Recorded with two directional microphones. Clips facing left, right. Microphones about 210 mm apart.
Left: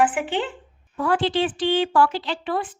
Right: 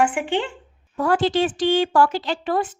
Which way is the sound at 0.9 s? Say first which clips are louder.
Right 2 dB; 45° right (ahead or behind).